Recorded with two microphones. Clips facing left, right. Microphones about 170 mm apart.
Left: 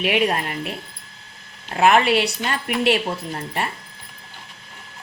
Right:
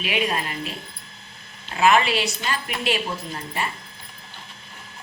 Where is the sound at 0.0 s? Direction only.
60° left (ahead or behind).